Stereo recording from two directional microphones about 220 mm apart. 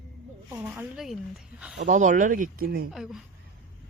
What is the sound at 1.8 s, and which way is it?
Speech, 35° right (ahead or behind).